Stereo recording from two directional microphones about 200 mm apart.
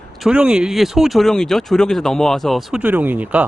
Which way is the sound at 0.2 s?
5° right (ahead or behind).